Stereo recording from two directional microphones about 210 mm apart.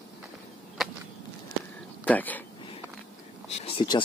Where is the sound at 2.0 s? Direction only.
10° left (ahead or behind).